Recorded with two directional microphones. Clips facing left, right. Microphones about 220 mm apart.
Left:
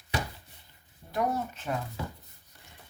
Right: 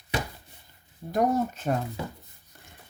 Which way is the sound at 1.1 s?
40° right (ahead or behind).